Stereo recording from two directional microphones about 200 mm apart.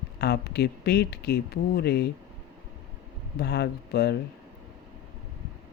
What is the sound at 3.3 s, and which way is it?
Speech, 55° left (ahead or behind).